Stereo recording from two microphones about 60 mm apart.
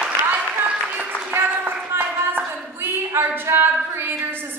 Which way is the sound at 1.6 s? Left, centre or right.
Right.